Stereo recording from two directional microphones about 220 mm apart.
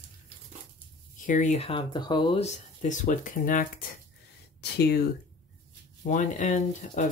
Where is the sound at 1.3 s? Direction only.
35° left (ahead or behind).